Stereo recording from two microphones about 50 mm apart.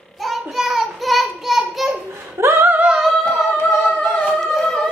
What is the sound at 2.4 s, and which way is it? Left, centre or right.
Singing, right.